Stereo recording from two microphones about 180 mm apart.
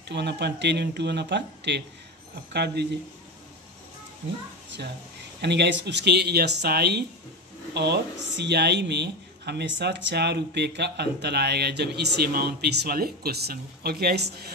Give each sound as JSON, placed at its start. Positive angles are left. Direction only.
{"t": 0.1, "sound": "speech", "side_deg": -70}
{"t": 5.4, "sound": "speech", "side_deg": -70}